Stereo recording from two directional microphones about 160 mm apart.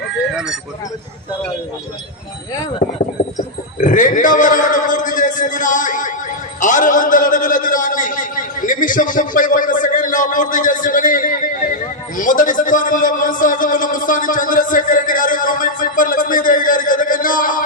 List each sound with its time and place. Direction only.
2.8 s a man's voice: 55° left (ahead or behind)